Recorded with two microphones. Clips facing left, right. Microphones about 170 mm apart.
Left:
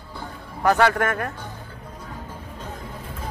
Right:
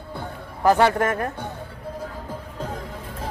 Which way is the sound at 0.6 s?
25° right (ahead or behind).